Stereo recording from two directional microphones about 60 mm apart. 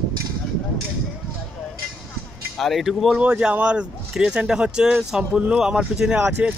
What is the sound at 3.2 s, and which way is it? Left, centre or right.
Speech, centre.